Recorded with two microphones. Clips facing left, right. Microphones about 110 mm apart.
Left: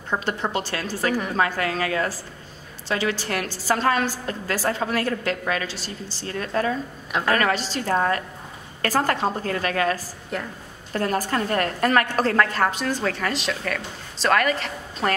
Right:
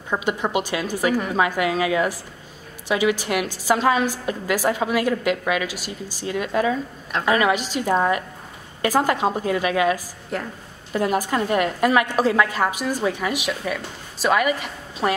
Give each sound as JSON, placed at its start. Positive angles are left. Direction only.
{"t": 0.1, "sound": "a woman's voice", "side_deg": -10}
{"t": 10.3, "sound": "a woman's voice", "side_deg": 0}
{"t": 10.9, "sound": "a woman's voice", "side_deg": -10}